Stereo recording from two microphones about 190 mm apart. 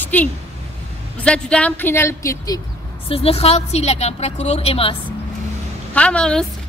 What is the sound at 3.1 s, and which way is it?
A woman's voice, 30° left (ahead or behind).